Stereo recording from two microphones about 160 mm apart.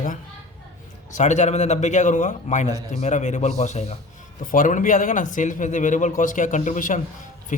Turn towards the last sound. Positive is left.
turn(degrees=50)  # may be behind; listen again after turning